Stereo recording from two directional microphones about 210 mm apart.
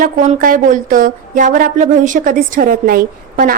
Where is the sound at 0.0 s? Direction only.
40° right (ahead or behind).